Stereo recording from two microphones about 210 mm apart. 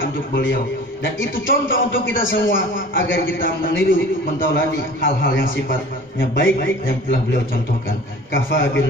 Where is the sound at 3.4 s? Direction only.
40° left (ahead or behind).